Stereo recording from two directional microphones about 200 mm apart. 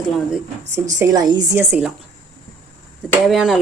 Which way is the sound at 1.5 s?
5° right (ahead or behind).